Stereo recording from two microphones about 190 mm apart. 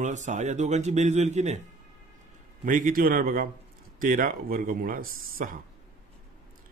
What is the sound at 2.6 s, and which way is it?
A man's voice, 45° right (ahead or behind).